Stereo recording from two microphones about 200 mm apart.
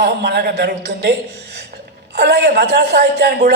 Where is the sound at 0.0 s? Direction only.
55° right (ahead or behind).